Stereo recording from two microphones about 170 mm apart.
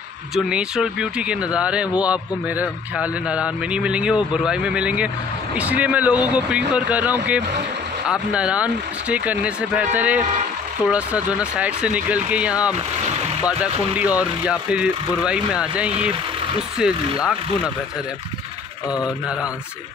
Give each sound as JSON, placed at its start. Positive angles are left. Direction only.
{"t": 0.3, "sound": "speech", "side_deg": -5}
{"t": 13.9, "sound": "speech", "side_deg": -10}
{"t": 18.9, "sound": "a sound", "side_deg": 20}